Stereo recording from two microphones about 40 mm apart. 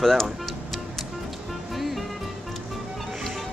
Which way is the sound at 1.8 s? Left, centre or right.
Centre.